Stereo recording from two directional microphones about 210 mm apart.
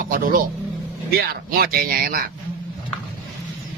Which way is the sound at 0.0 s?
45° right (ahead or behind).